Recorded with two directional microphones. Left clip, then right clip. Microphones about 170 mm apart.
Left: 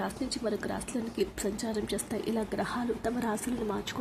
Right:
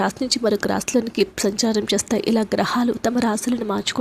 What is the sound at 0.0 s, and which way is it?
Speech, 40° right (ahead or behind).